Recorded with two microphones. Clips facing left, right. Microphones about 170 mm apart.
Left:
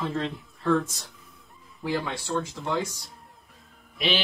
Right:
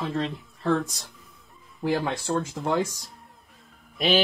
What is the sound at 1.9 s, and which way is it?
Speech, 60° right (ahead or behind).